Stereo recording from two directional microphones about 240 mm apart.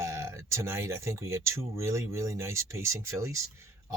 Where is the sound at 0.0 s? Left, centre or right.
Centre.